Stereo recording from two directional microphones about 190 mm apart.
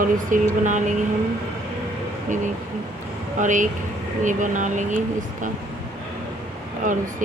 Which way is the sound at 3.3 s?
40° right (ahead or behind).